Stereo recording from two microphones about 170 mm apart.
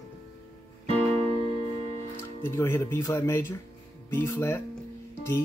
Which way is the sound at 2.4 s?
15° left (ahead or behind).